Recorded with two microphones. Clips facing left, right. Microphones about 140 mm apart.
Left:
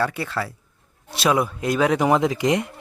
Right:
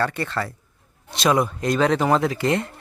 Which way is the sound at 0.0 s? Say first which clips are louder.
Even; 5° left (ahead or behind).